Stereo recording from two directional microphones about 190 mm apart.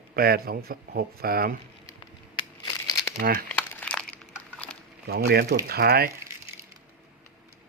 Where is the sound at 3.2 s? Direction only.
55° right (ahead or behind).